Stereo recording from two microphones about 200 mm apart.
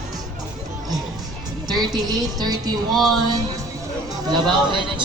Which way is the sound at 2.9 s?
Centre (ahead or behind).